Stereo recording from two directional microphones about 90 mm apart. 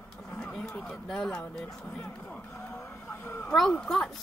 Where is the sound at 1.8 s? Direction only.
10° left (ahead or behind).